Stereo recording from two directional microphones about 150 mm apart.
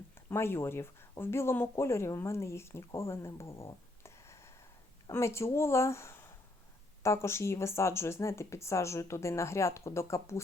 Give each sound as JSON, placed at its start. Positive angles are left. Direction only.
{"t": 0.3, "sound": "speech", "side_deg": 15}